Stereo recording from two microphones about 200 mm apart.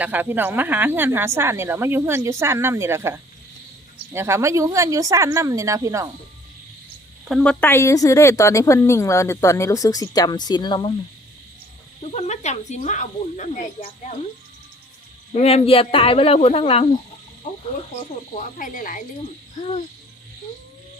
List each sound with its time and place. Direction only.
0.0 s a woman's voice: 10° right (ahead or behind)
7.3 s a woman's voice: centre (ahead or behind); by 10.9 s 20° left (ahead or behind)
12.0 s speech: 35° left (ahead or behind)
15.3 s speech: 30° left (ahead or behind)
18.3 s speech: 40° left (ahead or behind)